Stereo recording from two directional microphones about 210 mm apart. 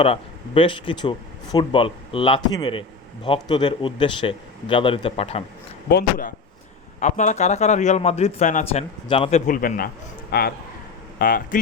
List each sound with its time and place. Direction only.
0.0 s speech: 25° left (ahead or behind)
5.9 s speech: 45° left (ahead or behind)
7.0 s a man's voice: 35° left (ahead or behind)